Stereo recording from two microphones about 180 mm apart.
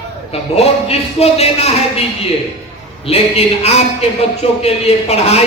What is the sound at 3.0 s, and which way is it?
A man's voice, 35° left (ahead or behind).